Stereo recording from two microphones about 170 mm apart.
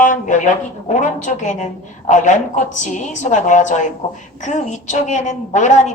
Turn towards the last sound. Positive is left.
turn(degrees=45)  # may be behind; listen again after turning